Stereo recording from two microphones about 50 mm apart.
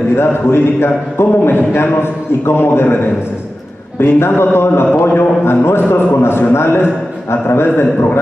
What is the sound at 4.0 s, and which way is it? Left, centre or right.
A man's voice, left.